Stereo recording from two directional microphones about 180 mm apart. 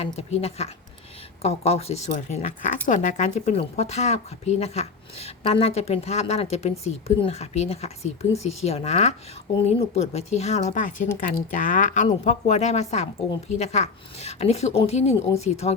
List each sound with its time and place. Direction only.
0.0 s speech: 35° left (ahead or behind)